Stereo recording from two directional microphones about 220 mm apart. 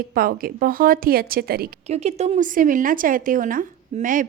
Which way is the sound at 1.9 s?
30° right (ahead or behind).